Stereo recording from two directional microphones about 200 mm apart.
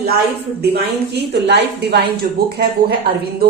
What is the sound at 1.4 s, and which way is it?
A woman's voice, 55° right (ahead or behind).